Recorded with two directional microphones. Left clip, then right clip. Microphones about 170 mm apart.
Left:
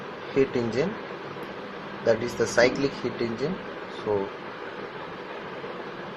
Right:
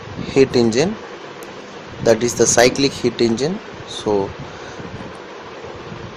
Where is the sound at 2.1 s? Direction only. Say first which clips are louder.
Right 9 dB; 60° right (ahead or behind).